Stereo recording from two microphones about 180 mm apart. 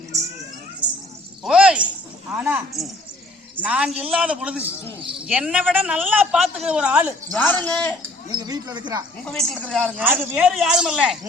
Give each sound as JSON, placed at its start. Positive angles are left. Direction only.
{"t": 1.5, "sound": "a sound", "side_deg": -5}
{"t": 2.3, "sound": "a man's voice", "side_deg": -5}
{"t": 7.3, "sound": "a man's voice", "side_deg": 10}
{"t": 8.3, "sound": "speech", "side_deg": -20}
{"t": 9.2, "sound": "speech", "side_deg": 5}
{"t": 10.0, "sound": "speech", "side_deg": -10}